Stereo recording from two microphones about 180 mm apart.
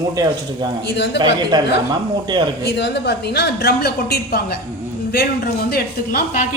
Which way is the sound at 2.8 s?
70° left (ahead or behind).